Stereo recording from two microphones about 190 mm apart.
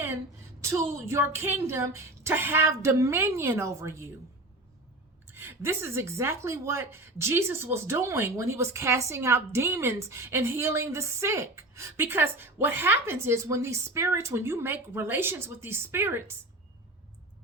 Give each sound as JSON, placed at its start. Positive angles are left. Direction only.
{"t": 0.6, "sound": "speech", "side_deg": -15}
{"t": 5.3, "sound": "speech", "side_deg": -10}